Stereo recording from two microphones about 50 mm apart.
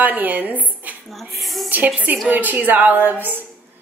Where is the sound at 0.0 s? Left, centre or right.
Right.